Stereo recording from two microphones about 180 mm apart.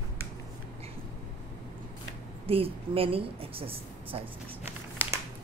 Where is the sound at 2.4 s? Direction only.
30° right (ahead or behind).